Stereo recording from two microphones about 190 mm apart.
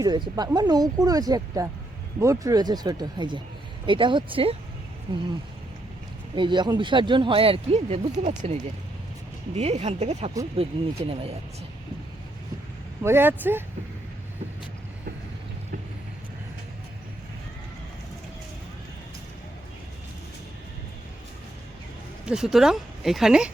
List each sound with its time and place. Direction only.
0.0 s speech: 20° right (ahead or behind)
6.3 s speech: 25° right (ahead or behind)
9.6 s speech: 35° right (ahead or behind)
13.0 s speech: 15° right (ahead or behind)
22.3 s speech: 5° right (ahead or behind)